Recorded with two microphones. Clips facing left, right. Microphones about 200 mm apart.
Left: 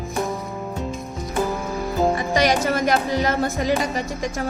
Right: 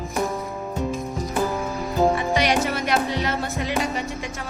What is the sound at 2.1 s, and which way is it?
A woman's voice, 40° left (ahead or behind).